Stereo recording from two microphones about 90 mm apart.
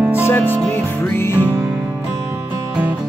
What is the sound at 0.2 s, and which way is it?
Music, 25° left (ahead or behind).